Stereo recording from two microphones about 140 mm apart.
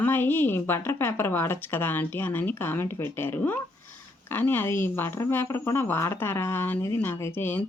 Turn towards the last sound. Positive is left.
turn(degrees=15)  # may be behind; listen again after turning